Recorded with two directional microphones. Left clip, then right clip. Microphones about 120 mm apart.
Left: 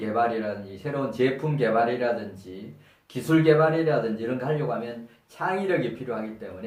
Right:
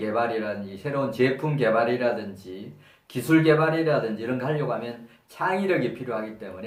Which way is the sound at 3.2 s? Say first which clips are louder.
Even; 30° right (ahead or behind).